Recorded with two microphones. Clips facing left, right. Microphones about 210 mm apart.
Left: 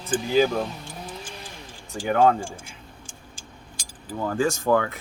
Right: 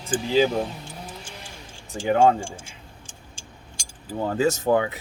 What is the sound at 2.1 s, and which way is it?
Speech, 25° right (ahead or behind).